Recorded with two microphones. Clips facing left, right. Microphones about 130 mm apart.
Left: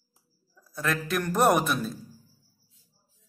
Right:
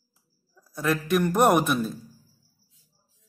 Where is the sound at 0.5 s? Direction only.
10° right (ahead or behind).